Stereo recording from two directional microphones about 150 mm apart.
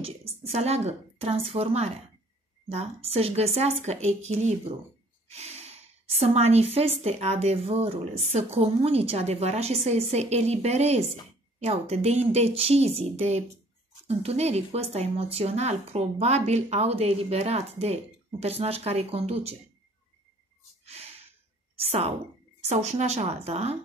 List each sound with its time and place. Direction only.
0.0 s a woman's voice: 40° right (ahead or behind)
20.8 s a sound: 45° right (ahead or behind)
21.7 s a woman's voice: 45° right (ahead or behind)